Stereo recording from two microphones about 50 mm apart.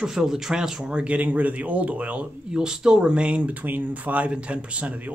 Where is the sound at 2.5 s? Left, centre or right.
Centre.